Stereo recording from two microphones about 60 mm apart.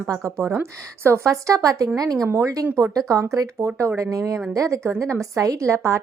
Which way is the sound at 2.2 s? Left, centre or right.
Right.